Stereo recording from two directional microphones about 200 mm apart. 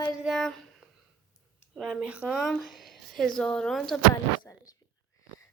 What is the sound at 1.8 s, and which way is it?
A woman's voice, 5° right (ahead or behind).